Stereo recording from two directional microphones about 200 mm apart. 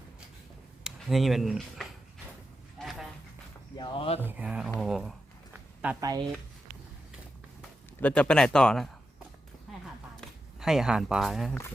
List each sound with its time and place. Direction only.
0.9 s speech: centre (ahead or behind)
2.7 s a sound: centre (ahead or behind)
3.8 s speech: 25° left (ahead or behind)
4.2 s speech: 10° right (ahead or behind)
8.0 s speech: 5° left (ahead or behind)
9.8 s a sound: centre (ahead or behind)